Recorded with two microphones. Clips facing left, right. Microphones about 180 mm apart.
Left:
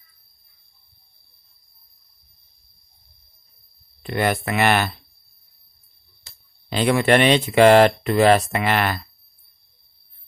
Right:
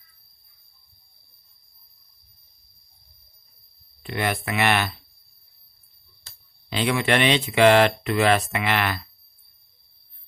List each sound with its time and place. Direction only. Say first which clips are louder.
4.0 s speech: left 5 dB; 45° left (ahead or behind)
6.7 s speech: left 5 dB; 45° left (ahead or behind)